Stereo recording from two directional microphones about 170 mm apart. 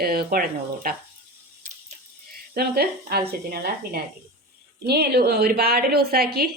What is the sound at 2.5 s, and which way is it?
A woman's voice, 65° right (ahead or behind).